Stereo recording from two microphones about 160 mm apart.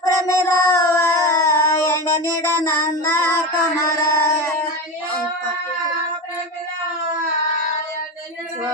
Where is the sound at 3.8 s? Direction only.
20° left (ahead or behind).